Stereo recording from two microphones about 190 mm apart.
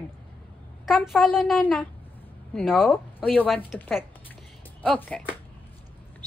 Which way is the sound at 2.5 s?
Centre (ahead or behind).